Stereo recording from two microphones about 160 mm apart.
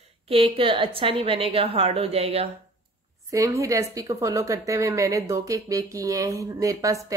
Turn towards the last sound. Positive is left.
turn(degrees=-20)  # may be behind; listen again after turning